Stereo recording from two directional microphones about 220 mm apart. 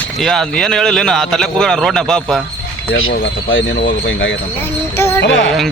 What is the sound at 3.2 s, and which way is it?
Speech, 60° left (ahead or behind).